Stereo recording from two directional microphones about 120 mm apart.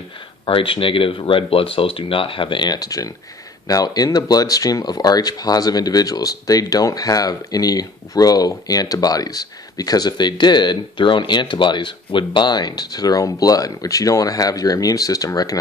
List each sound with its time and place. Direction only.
0.5 s speech: 50° left (ahead or behind); by 15.6 s 30° left (ahead or behind)